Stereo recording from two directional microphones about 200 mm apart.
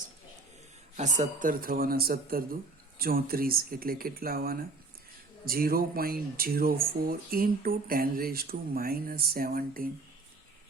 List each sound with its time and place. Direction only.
0.9 s speech: 35° right (ahead or behind)